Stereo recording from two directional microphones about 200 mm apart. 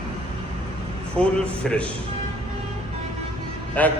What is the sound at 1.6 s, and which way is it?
Speech, 5° left (ahead or behind).